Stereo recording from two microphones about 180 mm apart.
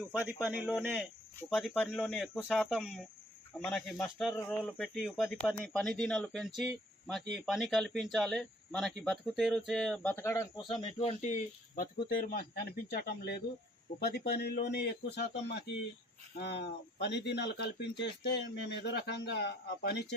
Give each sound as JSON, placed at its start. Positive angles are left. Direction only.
{"t": 0.1, "sound": "speech", "side_deg": -10}
{"t": 12.0, "sound": "speech", "side_deg": 60}